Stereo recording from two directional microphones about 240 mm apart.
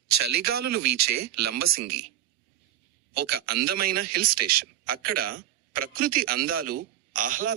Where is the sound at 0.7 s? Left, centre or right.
Right.